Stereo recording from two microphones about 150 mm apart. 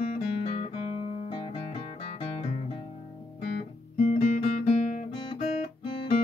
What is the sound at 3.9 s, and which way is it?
Guitar, 60° left (ahead or behind).